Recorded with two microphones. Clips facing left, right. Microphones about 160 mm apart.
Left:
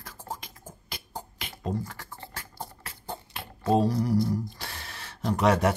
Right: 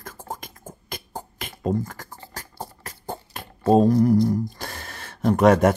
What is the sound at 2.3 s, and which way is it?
Beatboxing, 40° right (ahead or behind).